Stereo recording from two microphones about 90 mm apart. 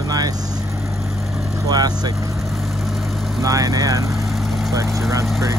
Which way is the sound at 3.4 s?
40° right (ahead or behind).